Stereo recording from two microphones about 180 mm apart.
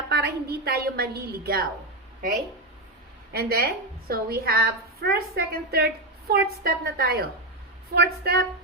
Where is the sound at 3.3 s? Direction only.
60° right (ahead or behind).